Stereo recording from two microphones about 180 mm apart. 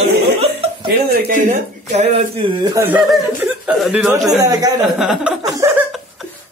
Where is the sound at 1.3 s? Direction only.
40° right (ahead or behind).